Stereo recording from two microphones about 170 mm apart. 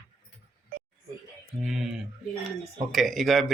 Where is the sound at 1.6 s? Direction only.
Centre (ahead or behind).